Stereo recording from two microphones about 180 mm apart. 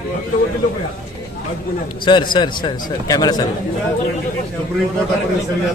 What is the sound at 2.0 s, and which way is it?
A man's voice, 25° left (ahead or behind).